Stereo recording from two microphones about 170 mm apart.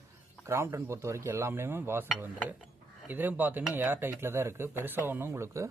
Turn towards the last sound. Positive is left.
turn(degrees=-15)  # may be behind; listen again after turning